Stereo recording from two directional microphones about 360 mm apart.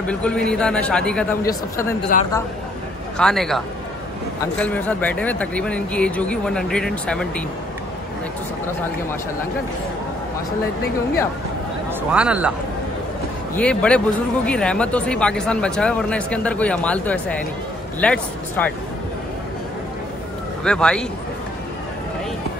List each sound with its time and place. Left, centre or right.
0.0 s a man's voice: centre
2.1 s speech: left
3.2 s speech: centre
12.1 s speech: centre
13.6 s speech: centre
20.6 s speech: centre